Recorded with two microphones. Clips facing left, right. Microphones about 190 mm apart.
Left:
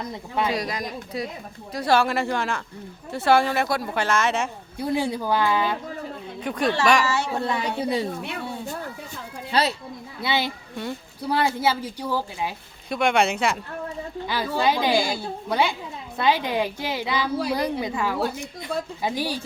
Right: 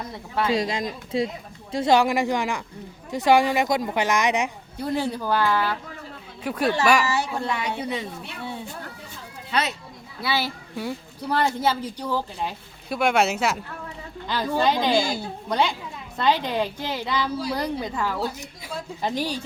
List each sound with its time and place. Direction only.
0.5 s speech: 25° right (ahead or behind)
4.8 s a woman's voice: 10° left (ahead or behind)
6.4 s speech: 5° right (ahead or behind)
7.5 s a woman's voice: 30° left (ahead or behind)
9.5 s a child's voice: 30° left (ahead or behind)
10.2 s a child's voice: 20° left (ahead or behind)
12.9 s speech: 5° right (ahead or behind)
14.3 s a woman's voice: 10° left (ahead or behind)